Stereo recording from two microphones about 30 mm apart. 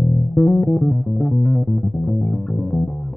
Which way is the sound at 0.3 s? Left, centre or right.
Left.